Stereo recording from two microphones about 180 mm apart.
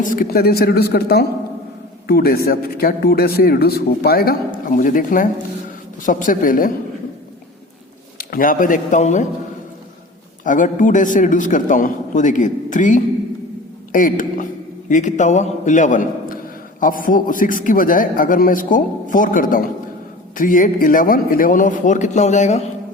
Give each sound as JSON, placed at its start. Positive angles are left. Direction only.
{"t": 0.0, "sound": "a man's voice", "side_deg": 55}
{"t": 8.2, "sound": "a man's voice", "side_deg": 55}
{"t": 10.4, "sound": "a man's voice", "side_deg": 45}